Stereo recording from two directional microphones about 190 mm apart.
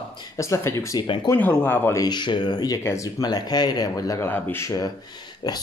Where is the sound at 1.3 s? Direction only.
10° left (ahead or behind).